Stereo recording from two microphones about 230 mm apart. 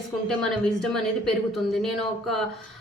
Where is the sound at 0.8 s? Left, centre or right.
Centre.